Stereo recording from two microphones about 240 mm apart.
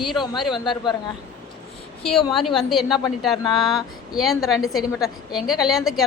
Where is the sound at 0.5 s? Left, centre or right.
Centre.